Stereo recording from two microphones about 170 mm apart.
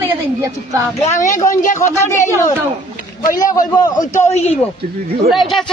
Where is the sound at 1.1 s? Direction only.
15° left (ahead or behind).